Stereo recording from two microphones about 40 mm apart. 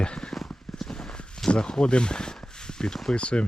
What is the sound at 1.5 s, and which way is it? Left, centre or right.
Speech, left.